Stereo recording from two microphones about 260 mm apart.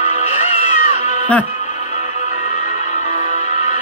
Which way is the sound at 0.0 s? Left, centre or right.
Left.